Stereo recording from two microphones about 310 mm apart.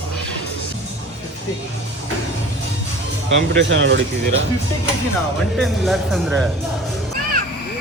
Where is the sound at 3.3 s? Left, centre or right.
Right.